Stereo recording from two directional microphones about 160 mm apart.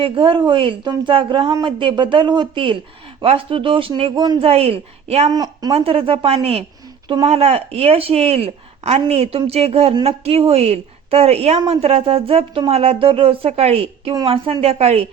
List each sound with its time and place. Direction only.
0.0 s a woman's voice: 35° right (ahead or behind)
5.3 s a woman's voice: 25° right (ahead or behind)
5.7 s a woman's voice: 35° right (ahead or behind)